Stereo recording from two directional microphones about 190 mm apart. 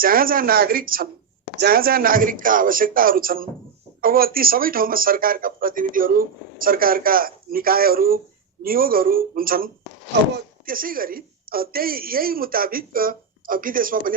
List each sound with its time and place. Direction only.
0.0 s speech: 50° right (ahead or behind)
10.7 s speech: 50° right (ahead or behind)